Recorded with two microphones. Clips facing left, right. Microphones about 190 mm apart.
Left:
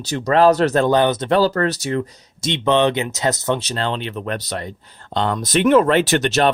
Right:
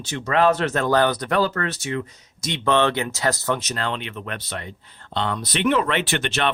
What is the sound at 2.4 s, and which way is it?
Speech, 20° left (ahead or behind).